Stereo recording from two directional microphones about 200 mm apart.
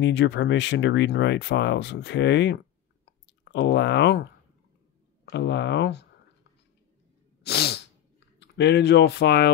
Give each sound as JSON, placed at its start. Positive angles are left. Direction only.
{"t": 0.0, "sound": "speech", "side_deg": 65}
{"t": 5.3, "sound": "speech", "side_deg": 60}
{"t": 7.4, "sound": "sneeze", "side_deg": 55}
{"t": 8.4, "sound": "speech", "side_deg": 60}